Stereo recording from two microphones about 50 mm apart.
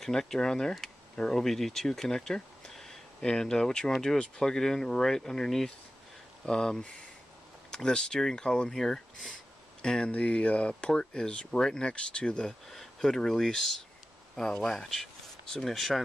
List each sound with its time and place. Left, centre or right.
0.0 s speech: centre